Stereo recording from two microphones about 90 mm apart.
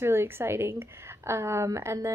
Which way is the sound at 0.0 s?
30° right (ahead or behind).